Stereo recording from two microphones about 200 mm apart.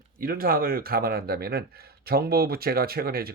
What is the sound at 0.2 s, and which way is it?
Speech, 45° right (ahead or behind).